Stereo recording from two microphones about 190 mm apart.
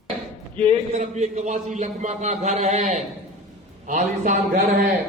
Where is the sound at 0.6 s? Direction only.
35° right (ahead or behind).